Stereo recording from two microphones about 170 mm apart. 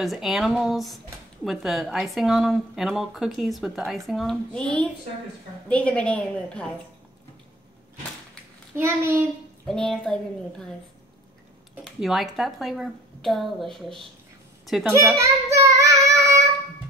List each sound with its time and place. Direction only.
0.0 s a woman's voice: centre (ahead or behind)
8.7 s a child's voice: 15° right (ahead or behind)
9.7 s speech: 5° left (ahead or behind)
11.8 s speech: centre (ahead or behind)
15.1 s child singing: 20° right (ahead or behind)